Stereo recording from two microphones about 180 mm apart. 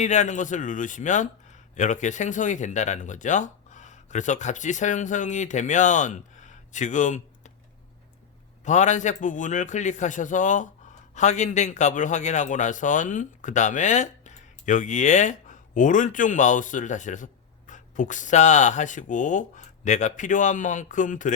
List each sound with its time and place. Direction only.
0.0 s a man's voice: 40° left (ahead or behind)
8.6 s a man's voice: 40° left (ahead or behind)